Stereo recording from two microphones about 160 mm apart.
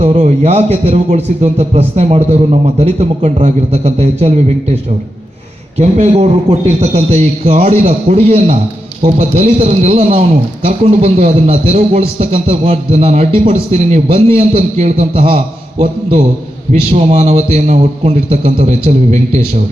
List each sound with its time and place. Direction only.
0.0 s a man's voice: 45° right (ahead or behind)
16.9 s a man's voice: 40° right (ahead or behind)